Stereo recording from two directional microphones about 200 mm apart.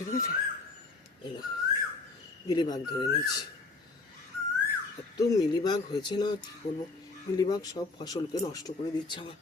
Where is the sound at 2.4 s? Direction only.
20° left (ahead or behind).